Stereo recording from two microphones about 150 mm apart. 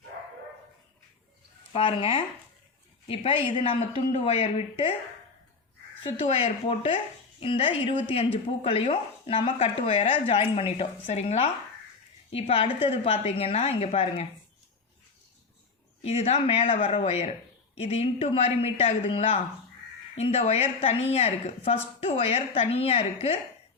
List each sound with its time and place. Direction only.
1.7 s speech: 40° left (ahead or behind)
6.1 s speech: 40° left (ahead or behind)
16.0 s speech: 40° left (ahead or behind)